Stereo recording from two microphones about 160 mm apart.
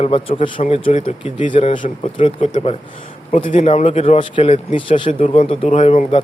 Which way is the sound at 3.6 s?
40° left (ahead or behind).